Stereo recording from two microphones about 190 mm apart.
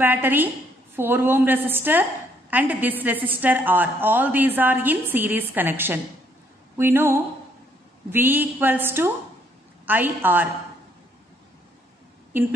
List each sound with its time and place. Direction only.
0.0 s a woman's voice: 10° right (ahead or behind)
12.3 s a woman's voice: 10° right (ahead or behind)